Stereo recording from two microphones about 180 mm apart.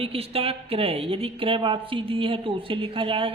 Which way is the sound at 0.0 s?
30° right (ahead or behind).